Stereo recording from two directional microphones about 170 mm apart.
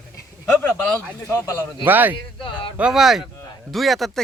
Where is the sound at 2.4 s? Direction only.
30° left (ahead or behind).